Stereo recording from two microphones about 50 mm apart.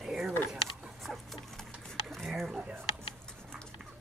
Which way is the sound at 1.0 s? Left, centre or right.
Centre.